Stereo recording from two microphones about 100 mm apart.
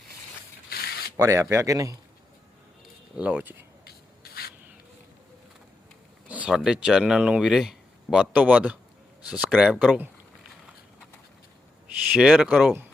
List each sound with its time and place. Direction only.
1.1 s speech: 30° right (ahead or behind)
3.2 s speech: 15° right (ahead or behind)
6.2 s speech: 15° right (ahead or behind)
12.0 s speech: 10° right (ahead or behind)